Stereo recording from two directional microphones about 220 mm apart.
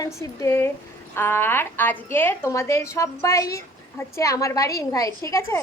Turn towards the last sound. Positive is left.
turn(degrees=10)  # may be behind; listen again after turning